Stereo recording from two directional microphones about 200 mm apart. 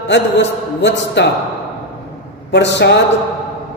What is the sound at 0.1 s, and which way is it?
A man's voice, 60° left (ahead or behind).